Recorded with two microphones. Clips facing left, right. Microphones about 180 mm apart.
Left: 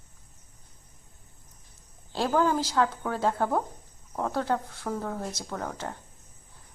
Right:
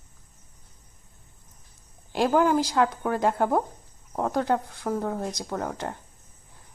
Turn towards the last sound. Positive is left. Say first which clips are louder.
# right 4 dB
turn(degrees=-15)  # may be behind; listen again after turning